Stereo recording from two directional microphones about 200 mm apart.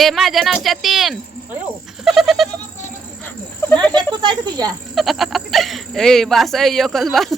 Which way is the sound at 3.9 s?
20° right (ahead or behind).